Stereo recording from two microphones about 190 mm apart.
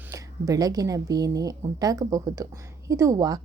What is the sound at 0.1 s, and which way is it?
A woman's voice, 20° right (ahead or behind).